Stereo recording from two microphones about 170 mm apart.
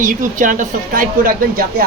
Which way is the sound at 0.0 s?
50° right (ahead or behind).